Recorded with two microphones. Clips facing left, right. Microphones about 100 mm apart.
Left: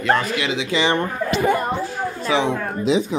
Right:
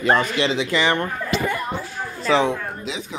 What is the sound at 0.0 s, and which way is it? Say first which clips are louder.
Speech: even; 5° right (ahead or behind).